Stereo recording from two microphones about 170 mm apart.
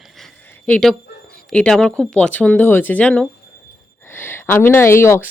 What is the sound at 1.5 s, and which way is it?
A woman's voice, 5° left (ahead or behind).